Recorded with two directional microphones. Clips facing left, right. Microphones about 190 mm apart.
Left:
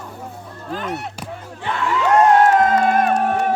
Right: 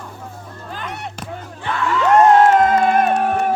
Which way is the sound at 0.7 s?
Centre (ahead or behind).